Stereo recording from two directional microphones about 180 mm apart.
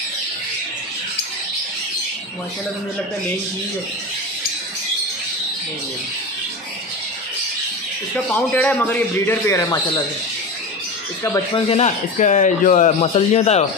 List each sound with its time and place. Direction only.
8.3 s a man's voice: 10° left (ahead or behind)
11.2 s speech: 20° left (ahead or behind)
11.7 s a man's voice: 40° left (ahead or behind)